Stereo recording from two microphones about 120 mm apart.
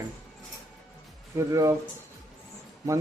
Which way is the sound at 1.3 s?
25° right (ahead or behind).